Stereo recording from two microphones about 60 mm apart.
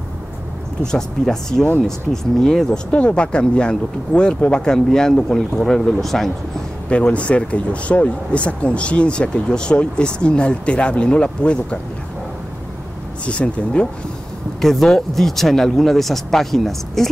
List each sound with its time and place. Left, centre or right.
0.9 s speech: centre
2.9 s speech: centre
6.9 s speech: left
13.2 s speech: centre
14.6 s speech: centre